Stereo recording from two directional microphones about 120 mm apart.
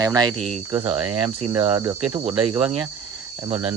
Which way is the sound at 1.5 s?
45° right (ahead or behind).